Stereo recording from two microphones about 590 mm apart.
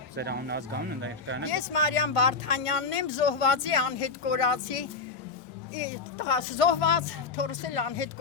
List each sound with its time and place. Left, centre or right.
0.2 s speech: centre
1.5 s speech: left